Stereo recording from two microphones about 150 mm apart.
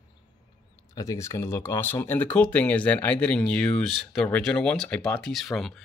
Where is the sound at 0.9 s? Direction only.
20° left (ahead or behind).